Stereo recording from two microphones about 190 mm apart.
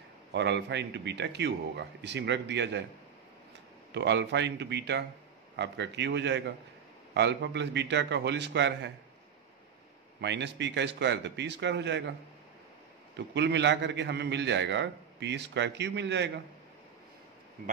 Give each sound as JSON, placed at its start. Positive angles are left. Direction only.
{"t": 0.3, "sound": "a man's voice", "side_deg": -65}
{"t": 3.9, "sound": "a man's voice", "side_deg": -65}
{"t": 10.2, "sound": "a man's voice", "side_deg": -65}
{"t": 13.1, "sound": "a man's voice", "side_deg": -65}